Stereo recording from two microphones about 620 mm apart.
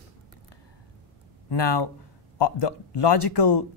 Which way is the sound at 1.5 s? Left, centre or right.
Left.